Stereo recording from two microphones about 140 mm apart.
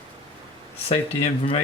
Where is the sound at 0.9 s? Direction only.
45° left (ahead or behind).